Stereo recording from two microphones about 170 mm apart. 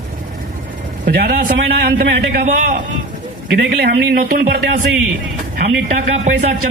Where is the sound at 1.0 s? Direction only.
65° right (ahead or behind).